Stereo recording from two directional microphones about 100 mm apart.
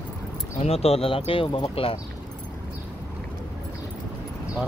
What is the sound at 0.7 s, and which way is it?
Speech, 80° left.